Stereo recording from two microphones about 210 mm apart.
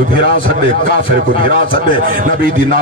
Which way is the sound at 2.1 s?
40° right (ahead or behind).